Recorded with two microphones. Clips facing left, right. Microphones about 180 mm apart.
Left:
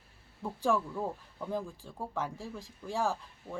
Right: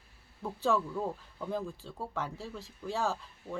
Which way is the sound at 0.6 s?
10° left (ahead or behind).